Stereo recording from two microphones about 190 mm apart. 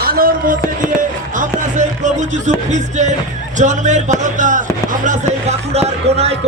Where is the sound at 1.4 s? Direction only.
40° right (ahead or behind).